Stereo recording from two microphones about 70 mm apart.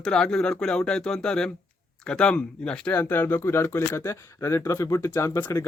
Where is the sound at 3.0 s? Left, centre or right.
Left.